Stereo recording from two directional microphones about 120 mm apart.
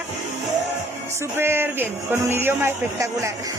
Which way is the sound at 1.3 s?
20° right (ahead or behind).